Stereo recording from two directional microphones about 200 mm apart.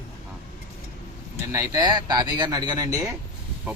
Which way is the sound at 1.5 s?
20° right (ahead or behind).